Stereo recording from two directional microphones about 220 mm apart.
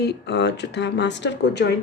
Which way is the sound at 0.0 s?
50° left (ahead or behind).